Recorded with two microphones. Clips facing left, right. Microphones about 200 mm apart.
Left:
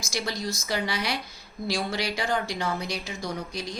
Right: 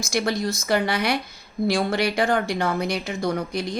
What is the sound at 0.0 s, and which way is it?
A woman's voice, 55° right (ahead or behind).